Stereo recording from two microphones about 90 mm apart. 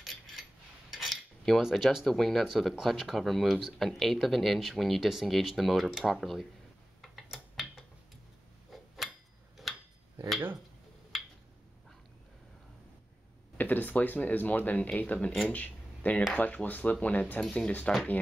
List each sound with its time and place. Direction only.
0.9 s cutlery: centre (ahead or behind)
2.4 s speech: 5° right (ahead or behind)
7.0 s a sound: centre (ahead or behind)
13.6 s speech: 20° left (ahead or behind)